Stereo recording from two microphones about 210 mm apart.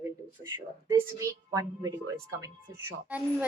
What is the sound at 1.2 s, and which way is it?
A woman's voice, 15° right (ahead or behind).